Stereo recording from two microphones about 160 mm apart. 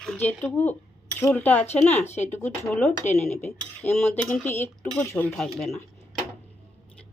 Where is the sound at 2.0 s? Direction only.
45° left (ahead or behind).